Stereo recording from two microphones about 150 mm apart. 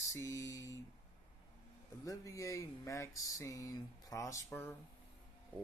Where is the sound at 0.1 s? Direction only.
20° left (ahead or behind).